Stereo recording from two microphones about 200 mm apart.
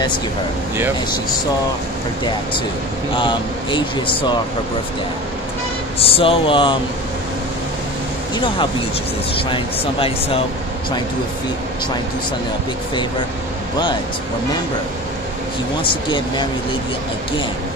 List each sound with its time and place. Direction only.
3.2 s speech: 25° left (ahead or behind)
5.9 s speech: 30° left (ahead or behind)
9.5 s speech: 25° left (ahead or behind)
15.8 s speech: 25° left (ahead or behind)